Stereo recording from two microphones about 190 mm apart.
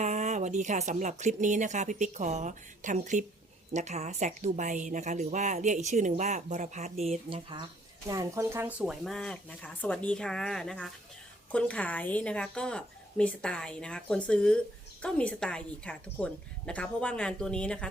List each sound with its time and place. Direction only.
0.0 s a woman's voice: 40° right (ahead or behind)
8.0 s speech: 20° right (ahead or behind); by 17.8 s 5° left (ahead or behind)